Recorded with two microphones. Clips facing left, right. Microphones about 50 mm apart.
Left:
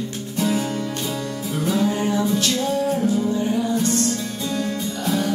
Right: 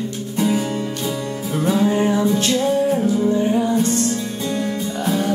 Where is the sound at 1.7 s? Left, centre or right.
Right.